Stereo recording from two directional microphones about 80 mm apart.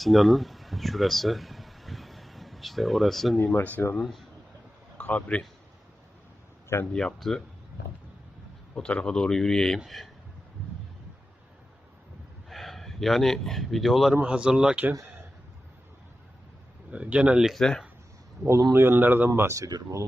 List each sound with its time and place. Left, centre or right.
0.0 s a sound: centre
3.4 s a man's voice: left
6.9 s a man's voice: centre
8.7 s a man's voice: centre
12.5 s speech: centre
14.2 s speech: centre
16.9 s speech: centre
17.5 s speech: centre
18.7 s a man's voice: right